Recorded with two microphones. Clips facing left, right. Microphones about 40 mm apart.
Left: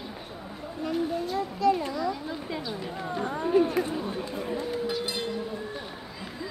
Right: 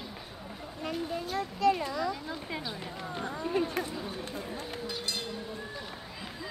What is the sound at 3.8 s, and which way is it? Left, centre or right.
Speech, left.